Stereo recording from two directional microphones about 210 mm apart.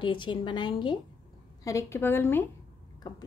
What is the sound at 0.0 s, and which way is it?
A woman's voice, 20° left (ahead or behind).